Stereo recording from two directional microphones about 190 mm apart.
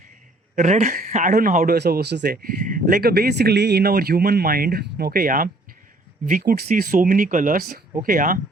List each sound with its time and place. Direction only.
0.5 s speech: 40° right (ahead or behind)